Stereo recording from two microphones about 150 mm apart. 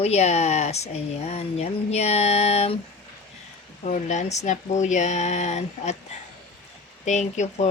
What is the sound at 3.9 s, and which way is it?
Speech, 55° left (ahead or behind).